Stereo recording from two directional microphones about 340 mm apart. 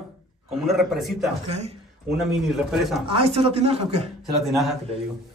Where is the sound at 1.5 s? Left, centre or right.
Centre.